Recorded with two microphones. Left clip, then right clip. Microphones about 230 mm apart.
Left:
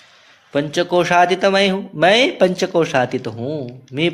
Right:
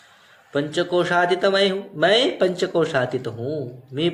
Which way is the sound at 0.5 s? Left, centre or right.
Left.